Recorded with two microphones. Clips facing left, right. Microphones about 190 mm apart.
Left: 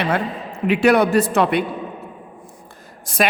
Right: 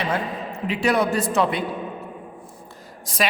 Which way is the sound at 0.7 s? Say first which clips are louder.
Left 6 dB; 65° left (ahead or behind).